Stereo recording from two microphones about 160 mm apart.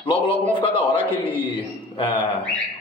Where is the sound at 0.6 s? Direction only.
35° left (ahead or behind).